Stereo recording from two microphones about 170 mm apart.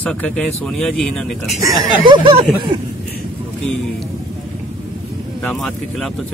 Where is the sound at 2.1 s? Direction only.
30° right (ahead or behind).